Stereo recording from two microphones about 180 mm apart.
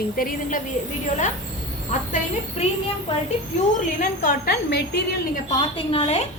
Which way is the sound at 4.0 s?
55° left (ahead or behind).